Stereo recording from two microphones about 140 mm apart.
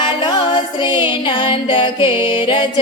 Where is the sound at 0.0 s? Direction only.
35° left (ahead or behind).